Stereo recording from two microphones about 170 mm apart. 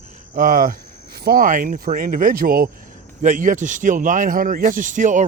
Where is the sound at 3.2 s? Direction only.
50° right (ahead or behind).